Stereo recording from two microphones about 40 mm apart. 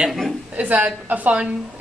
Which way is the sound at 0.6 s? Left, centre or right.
Right.